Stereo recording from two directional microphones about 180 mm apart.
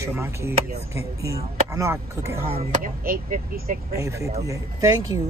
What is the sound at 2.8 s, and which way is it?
Speech, 50° right (ahead or behind).